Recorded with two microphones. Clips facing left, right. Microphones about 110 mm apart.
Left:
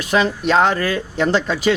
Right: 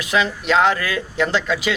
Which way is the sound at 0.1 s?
40° left (ahead or behind).